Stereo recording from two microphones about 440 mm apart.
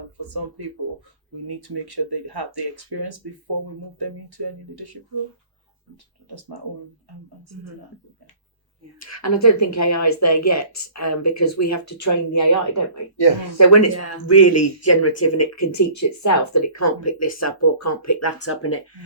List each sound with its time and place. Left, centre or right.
0.3 s speech: right
6.2 s speech: right
9.0 s speech: left
13.2 s speech: left
13.6 s speech: left